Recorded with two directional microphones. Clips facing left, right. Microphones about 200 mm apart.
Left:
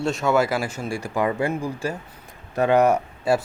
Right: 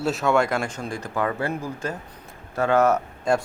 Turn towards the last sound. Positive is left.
turn(degrees=10)  # may be behind; listen again after turning